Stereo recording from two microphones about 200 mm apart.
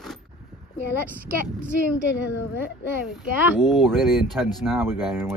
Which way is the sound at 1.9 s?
65° left (ahead or behind).